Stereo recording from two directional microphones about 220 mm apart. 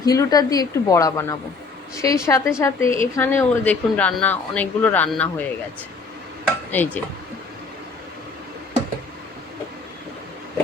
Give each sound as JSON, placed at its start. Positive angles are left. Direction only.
{"t": 0.0, "sound": "speech", "side_deg": 15}
{"t": 6.7, "sound": "speech", "side_deg": 10}